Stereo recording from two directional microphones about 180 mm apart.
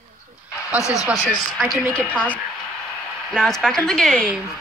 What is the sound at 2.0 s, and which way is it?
A woman's voice, 5° left (ahead or behind).